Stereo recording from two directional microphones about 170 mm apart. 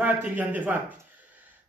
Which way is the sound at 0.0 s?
10° right (ahead or behind).